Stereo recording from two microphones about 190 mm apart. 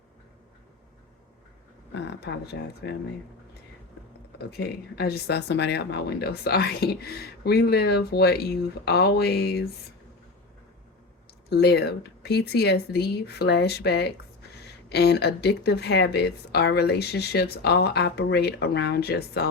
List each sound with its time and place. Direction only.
1.9 s speech: 65° left (ahead or behind)
4.5 s speech: 60° left (ahead or behind)
11.4 s speech: 60° left (ahead or behind)